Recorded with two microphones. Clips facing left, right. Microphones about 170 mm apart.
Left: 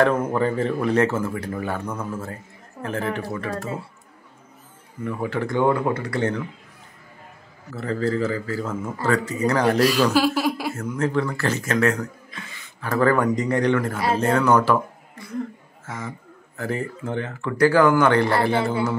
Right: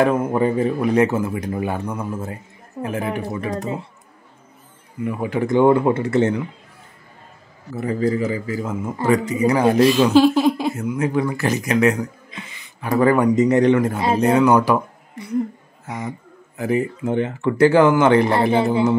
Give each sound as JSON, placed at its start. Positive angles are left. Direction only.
{"t": 0.0, "sound": "speech", "side_deg": -15}
{"t": 5.0, "sound": "speech", "side_deg": -15}
{"t": 7.7, "sound": "speech", "side_deg": -15}